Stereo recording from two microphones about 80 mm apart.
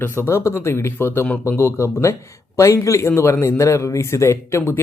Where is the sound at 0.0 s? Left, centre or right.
Left.